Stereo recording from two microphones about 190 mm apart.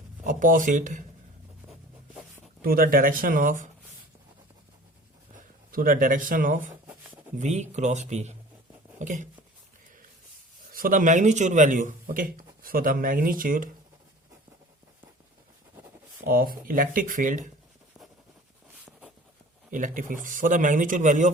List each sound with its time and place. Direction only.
0.3 s speech: 45° right (ahead or behind)
2.6 s speech: 50° right (ahead or behind)
5.3 s speech: 50° right (ahead or behind)
10.7 s speech: 50° right (ahead or behind)
16.2 s speech: 50° right (ahead or behind)
18.9 s a sound: centre (ahead or behind)
19.7 s speech: 45° right (ahead or behind)